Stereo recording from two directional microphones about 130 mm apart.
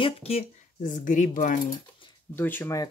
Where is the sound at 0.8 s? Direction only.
85° left.